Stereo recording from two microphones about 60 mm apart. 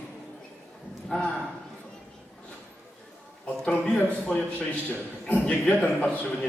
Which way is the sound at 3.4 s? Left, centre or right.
Centre.